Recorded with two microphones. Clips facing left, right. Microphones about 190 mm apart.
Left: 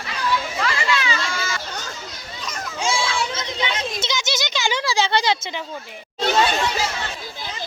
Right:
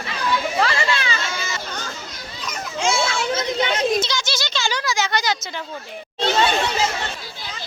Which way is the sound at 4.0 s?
20° left (ahead or behind).